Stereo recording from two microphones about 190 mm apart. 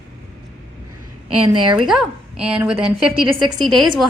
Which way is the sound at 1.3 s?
25° right (ahead or behind).